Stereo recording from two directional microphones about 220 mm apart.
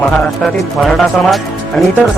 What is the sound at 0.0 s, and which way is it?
Speech, centre (ahead or behind).